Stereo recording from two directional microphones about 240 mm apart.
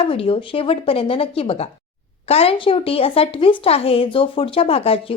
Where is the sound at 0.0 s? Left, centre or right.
Left.